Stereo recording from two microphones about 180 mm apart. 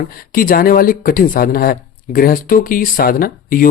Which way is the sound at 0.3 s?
55° left (ahead or behind).